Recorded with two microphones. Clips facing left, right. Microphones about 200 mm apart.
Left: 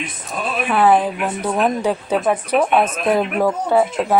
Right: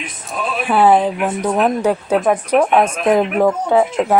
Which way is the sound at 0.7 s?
30° right (ahead or behind).